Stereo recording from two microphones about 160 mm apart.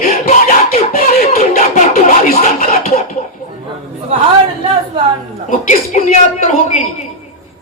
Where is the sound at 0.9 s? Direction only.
65° left (ahead or behind).